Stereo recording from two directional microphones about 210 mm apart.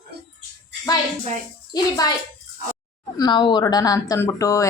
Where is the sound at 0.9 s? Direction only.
20° left (ahead or behind).